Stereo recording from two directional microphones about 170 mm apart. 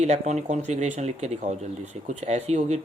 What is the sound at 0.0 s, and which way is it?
Speech, 40° right (ahead or behind).